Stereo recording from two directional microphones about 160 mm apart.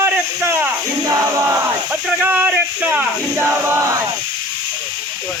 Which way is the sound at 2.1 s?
5° right (ahead or behind).